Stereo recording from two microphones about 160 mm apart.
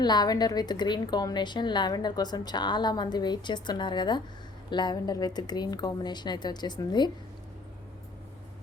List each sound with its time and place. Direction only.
0.0 s a woman's voice: 25° left (ahead or behind)